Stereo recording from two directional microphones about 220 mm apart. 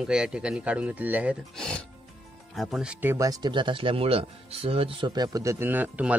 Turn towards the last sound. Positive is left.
turn(degrees=-5)  # may be behind; listen again after turning